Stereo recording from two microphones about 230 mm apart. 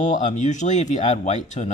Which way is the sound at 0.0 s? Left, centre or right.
Left.